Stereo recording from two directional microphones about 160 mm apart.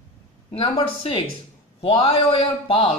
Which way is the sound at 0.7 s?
35° left (ahead or behind).